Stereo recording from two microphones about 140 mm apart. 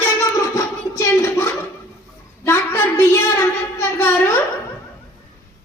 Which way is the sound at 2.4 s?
15° left (ahead or behind).